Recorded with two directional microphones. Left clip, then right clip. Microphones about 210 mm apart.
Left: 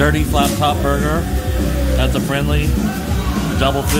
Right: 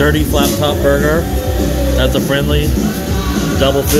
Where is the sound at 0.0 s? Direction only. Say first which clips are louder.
Right 3 dB; 10° left (ahead or behind).